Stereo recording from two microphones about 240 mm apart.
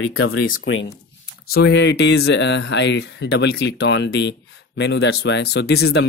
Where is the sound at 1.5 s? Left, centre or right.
Left.